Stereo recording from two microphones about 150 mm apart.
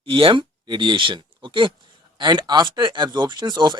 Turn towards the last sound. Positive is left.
turn(degrees=-30)  # may be behind; listen again after turning